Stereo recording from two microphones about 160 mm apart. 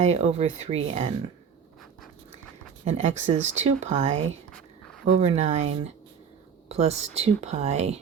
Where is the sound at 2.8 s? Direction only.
45° right (ahead or behind).